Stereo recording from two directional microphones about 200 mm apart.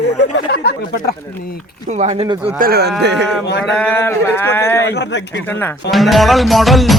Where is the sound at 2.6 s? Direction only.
50° right (ahead or behind).